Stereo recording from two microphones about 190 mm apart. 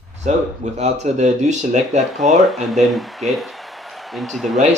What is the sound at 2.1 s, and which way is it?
Speech, centre (ahead or behind).